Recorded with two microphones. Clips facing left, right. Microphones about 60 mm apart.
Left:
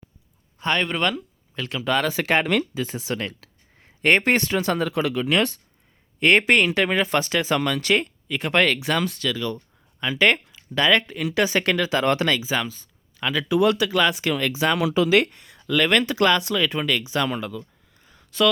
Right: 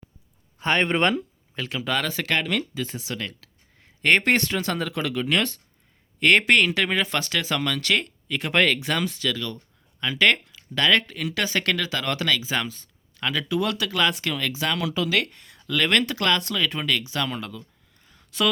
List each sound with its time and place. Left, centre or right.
0.6 s speech: right
1.5 s speech: centre
2.0 s speech: left
2.4 s speech: left; by 8.4 s centre
8.4 s speech: centre
9.3 s speech: centre
12.4 s speech: centre
14.3 s speech: left
15.4 s speech: centre
17.4 s a sound: centre